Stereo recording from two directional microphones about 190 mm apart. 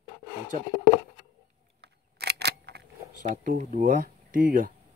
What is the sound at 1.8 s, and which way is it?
Camera, 60° right (ahead or behind).